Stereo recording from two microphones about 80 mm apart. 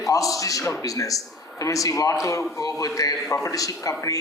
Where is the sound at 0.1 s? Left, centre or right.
Left.